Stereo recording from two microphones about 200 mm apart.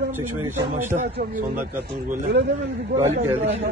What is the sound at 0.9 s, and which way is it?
Speech, 45° right (ahead or behind).